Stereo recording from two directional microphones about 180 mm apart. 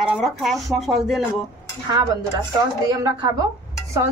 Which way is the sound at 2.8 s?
20° right (ahead or behind).